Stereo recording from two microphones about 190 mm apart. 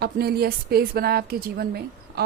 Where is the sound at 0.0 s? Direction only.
55° right (ahead or behind).